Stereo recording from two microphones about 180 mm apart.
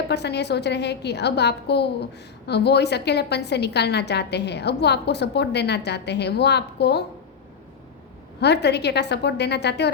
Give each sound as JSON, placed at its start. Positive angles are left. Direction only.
{"t": 0.1, "sound": "a woman's voice", "side_deg": 70}
{"t": 8.4, "sound": "a woman's voice", "side_deg": 70}